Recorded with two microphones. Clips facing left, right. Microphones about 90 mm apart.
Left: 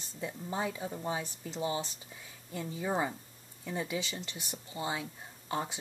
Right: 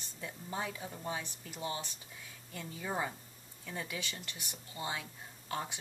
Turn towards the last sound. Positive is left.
turn(degrees=15)  # may be behind; listen again after turning